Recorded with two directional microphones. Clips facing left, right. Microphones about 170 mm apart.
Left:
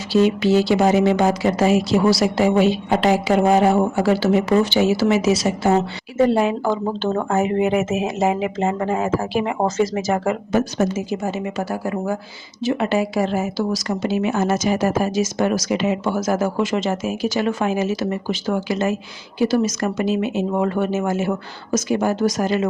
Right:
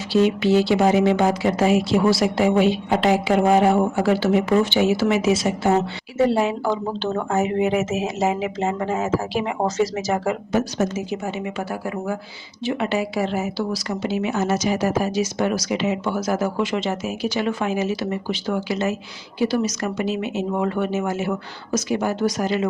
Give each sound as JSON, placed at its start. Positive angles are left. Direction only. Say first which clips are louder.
{"t": 0.1, "sound": "speech", "louder": "left 1 dB", "side_deg": 40}
{"t": 6.1, "sound": "a woman's voice", "louder": "left 2 dB", "side_deg": 50}